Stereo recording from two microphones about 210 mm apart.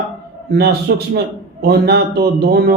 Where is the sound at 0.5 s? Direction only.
50° right (ahead or behind).